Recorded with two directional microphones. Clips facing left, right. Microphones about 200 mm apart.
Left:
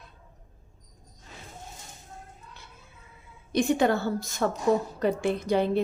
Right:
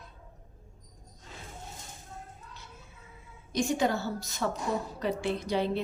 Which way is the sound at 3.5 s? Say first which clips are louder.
Left 5 dB; 60° left (ahead or behind).